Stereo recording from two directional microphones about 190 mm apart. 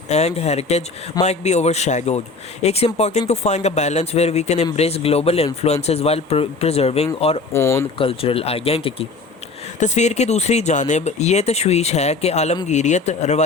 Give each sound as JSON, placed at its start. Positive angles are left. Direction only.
{"t": 0.1, "sound": "a man's voice", "side_deg": 35}
{"t": 7.5, "sound": "speech", "side_deg": 15}
{"t": 7.9, "sound": "a man's voice", "side_deg": 30}